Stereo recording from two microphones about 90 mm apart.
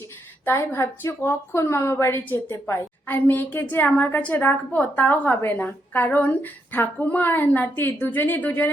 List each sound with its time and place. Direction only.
0.4 s a woman's voice: 30° left (ahead or behind)